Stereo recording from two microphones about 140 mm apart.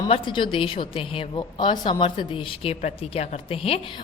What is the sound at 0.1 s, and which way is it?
A woman's voice, 35° left (ahead or behind).